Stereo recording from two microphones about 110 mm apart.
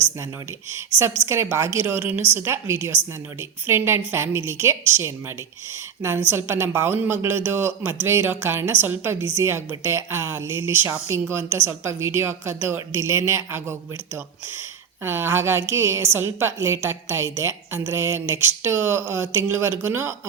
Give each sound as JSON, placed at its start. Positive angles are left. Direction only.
{"t": 0.7, "sound": "a woman's voice", "side_deg": -25}
{"t": 15.0, "sound": "a woman's voice", "side_deg": -20}